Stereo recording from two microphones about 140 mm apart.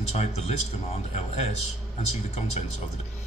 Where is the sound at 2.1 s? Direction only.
50° left (ahead or behind).